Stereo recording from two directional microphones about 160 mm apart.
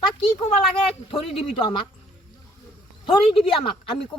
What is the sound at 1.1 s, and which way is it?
Speech, 35° left (ahead or behind).